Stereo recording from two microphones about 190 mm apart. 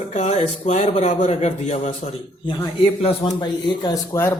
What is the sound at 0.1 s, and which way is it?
A man's voice, 40° left (ahead or behind).